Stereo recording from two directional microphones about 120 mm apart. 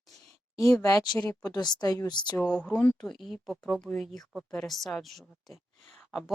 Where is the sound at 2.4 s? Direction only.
5° left (ahead or behind).